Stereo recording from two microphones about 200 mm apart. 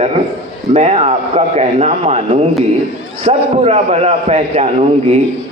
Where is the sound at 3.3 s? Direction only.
30° right (ahead or behind).